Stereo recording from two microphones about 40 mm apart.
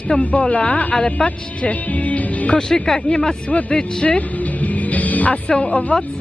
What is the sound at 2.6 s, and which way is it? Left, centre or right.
Speech, centre.